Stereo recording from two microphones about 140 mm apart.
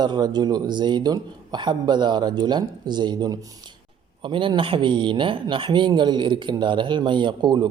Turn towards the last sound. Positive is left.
turn(degrees=-35)  # may be behind; listen again after turning